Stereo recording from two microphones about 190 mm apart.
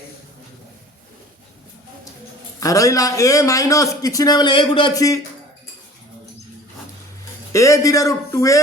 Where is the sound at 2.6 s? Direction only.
15° left (ahead or behind).